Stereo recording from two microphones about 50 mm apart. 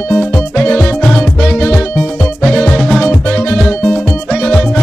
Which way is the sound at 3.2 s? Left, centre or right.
Left.